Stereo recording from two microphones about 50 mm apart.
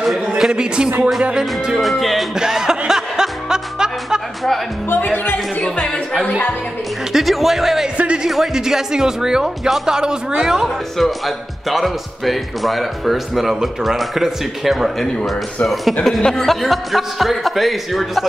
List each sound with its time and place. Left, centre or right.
0.4 s speech: centre
1.4 s speech: centre
2.3 s music: centre
5.0 s speech: left
7.1 s speech: centre
8.0 s speech: right
8.3 s speech: centre
11.0 s speech: centre
16.2 s speech: centre
16.6 s speech: centre